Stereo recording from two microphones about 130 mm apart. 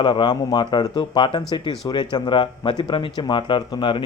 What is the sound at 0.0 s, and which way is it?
Speech, 35° left (ahead or behind).